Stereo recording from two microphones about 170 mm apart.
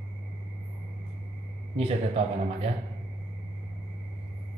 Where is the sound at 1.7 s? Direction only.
35° right (ahead or behind).